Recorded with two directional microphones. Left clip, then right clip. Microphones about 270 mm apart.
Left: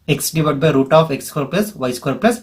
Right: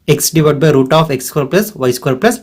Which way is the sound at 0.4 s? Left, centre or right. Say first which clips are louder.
Right 4 dB; right.